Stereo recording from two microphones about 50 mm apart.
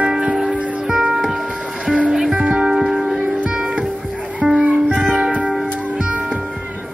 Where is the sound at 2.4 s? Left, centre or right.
Right.